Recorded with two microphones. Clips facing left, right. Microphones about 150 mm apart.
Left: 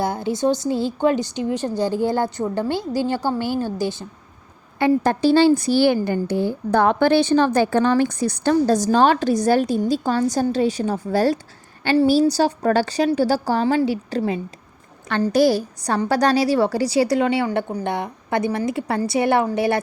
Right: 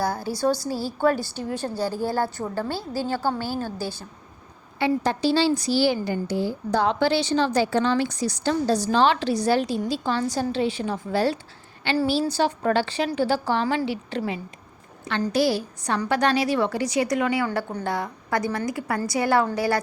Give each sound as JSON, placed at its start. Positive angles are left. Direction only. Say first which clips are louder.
{"t": 0.0, "sound": "a woman's voice", "louder": "left 3 dB", "side_deg": 20}
{"t": 4.8, "sound": "a woman's voice", "louder": "left 5 dB", "side_deg": 50}
{"t": 15.3, "sound": "a woman's voice", "louder": "left 6 dB", "side_deg": 45}